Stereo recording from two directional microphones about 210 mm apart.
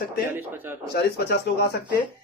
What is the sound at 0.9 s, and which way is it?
Speech, 50° left (ahead or behind).